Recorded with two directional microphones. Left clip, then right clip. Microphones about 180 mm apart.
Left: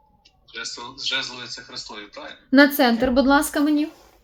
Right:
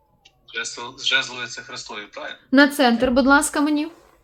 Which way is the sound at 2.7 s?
10° right (ahead or behind).